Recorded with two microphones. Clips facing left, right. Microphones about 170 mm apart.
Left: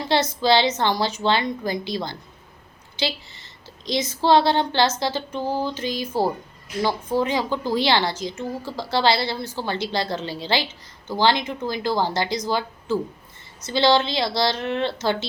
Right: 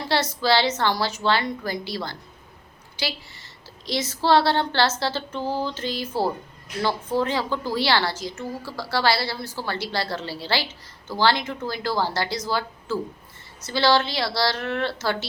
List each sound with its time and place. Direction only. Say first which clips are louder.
0.1 s a woman's voice: left 3 dB; 20° left (ahead or behind)